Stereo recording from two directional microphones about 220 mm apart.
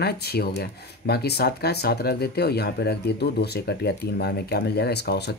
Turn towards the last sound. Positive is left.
turn(degrees=50)  # may be behind; listen again after turning